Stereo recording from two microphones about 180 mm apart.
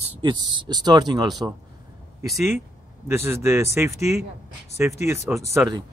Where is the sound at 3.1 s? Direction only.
15° right (ahead or behind).